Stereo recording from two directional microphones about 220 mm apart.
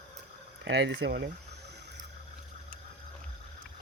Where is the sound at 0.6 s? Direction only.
55° right (ahead or behind).